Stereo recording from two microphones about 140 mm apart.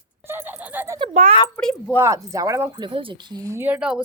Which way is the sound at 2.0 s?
20° right (ahead or behind).